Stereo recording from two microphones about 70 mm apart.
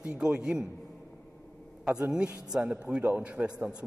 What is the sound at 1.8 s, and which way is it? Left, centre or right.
A man's voice, centre.